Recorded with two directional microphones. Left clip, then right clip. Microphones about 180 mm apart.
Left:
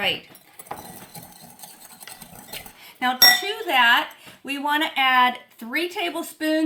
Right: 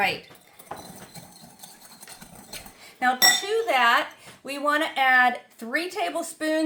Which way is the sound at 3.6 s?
25° right (ahead or behind).